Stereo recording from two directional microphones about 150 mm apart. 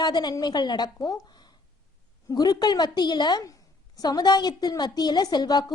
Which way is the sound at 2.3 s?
25° left (ahead or behind).